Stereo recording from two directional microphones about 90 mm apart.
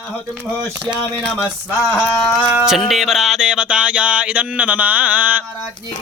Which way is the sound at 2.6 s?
Centre (ahead or behind).